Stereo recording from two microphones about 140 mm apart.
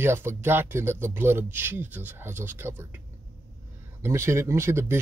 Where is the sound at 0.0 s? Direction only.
15° right (ahead or behind).